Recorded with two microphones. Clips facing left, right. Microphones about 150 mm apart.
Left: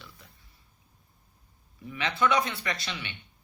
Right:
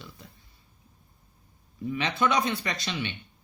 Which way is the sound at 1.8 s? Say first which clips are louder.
Right 1 dB; 20° right (ahead or behind).